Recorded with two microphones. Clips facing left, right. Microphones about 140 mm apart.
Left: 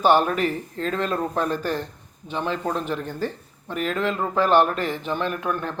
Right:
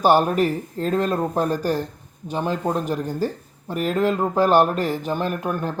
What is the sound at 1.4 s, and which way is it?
Speech, 40° right (ahead or behind).